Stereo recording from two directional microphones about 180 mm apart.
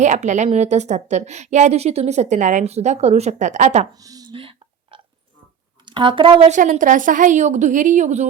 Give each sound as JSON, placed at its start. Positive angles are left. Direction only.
{"t": 0.0, "sound": "a woman's voice", "side_deg": -40}
{"t": 3.9, "sound": "whispering", "side_deg": -20}
{"t": 5.8, "sound": "speech", "side_deg": -25}
{"t": 6.5, "sound": "a woman's voice", "side_deg": -45}